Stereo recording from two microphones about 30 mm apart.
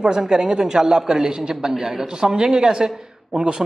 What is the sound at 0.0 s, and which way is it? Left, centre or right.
A man's voice, right.